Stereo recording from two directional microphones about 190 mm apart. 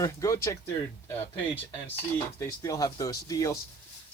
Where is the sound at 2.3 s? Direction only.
15° left (ahead or behind).